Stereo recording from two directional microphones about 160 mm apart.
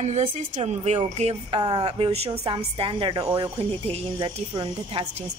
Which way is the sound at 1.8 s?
35° right (ahead or behind).